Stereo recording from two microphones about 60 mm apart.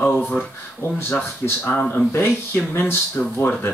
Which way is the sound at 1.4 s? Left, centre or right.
Left.